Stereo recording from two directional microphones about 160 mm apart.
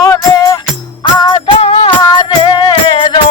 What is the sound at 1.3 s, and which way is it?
Music, 30° left (ahead or behind).